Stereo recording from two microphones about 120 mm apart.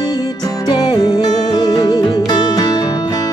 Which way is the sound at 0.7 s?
35° left (ahead or behind).